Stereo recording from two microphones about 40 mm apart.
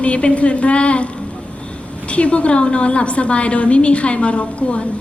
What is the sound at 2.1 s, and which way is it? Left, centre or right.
A woman's voice, left.